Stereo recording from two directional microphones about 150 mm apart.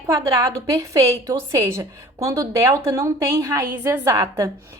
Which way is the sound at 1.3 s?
20° right (ahead or behind).